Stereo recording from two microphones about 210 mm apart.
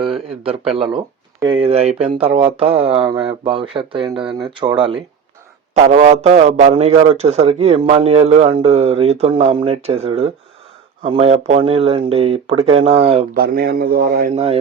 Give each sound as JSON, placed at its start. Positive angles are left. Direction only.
{"t": 0.7, "sound": "a man's voice", "side_deg": -25}
{"t": 13.3, "sound": "a man's voice", "side_deg": -45}
{"t": 14.3, "sound": "a man's voice", "side_deg": -30}